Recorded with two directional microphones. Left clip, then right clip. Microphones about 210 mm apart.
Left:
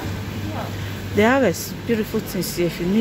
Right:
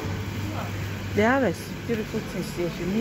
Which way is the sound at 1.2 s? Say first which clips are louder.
Left 5 dB; 15° left (ahead or behind).